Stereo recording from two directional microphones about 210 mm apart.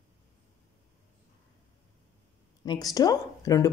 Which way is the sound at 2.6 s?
20° left (ahead or behind).